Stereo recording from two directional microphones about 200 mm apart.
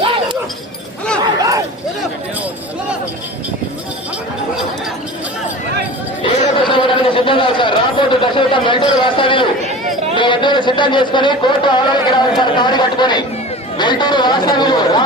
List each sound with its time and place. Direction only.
1.2 s a sound: 15° right (ahead or behind)
6.2 s chatter: 25° left (ahead or behind)
9.0 s speech: 25° left (ahead or behind)